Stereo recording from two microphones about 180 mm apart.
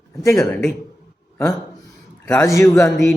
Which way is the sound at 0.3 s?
5° left (ahead or behind).